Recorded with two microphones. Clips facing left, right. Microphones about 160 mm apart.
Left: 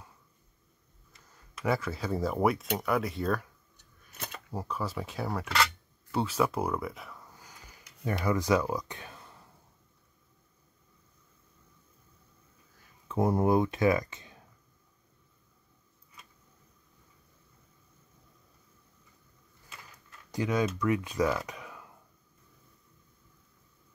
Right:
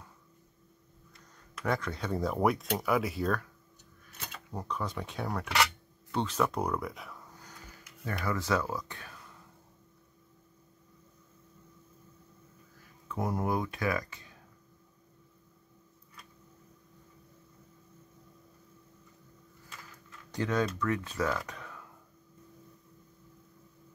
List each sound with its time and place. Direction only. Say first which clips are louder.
1.1 s speech: right 1 dB; 5° left (ahead or behind)
4.5 s speech: left 1 dB; 5° left (ahead or behind)
8.0 s speech: left 4 dB; 15° left (ahead or behind)
13.1 s speech: left 6 dB; 25° left (ahead or behind)
20.2 s speech: left 1 dB; 10° left (ahead or behind)